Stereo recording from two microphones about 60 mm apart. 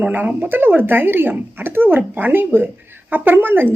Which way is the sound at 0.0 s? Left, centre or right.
Right.